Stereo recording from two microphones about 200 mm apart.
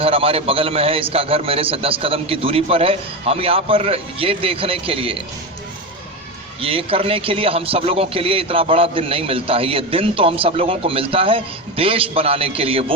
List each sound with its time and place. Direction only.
0.0 s a man's voice: 30° right (ahead or behind)
6.6 s a man's voice: 25° right (ahead or behind)